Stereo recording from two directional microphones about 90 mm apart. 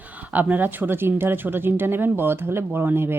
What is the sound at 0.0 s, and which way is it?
A woman's voice, 15° right (ahead or behind).